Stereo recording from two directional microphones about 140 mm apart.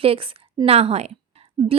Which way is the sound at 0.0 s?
40° right (ahead or behind).